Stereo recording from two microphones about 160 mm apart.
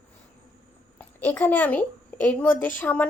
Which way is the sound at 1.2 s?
10° left (ahead or behind).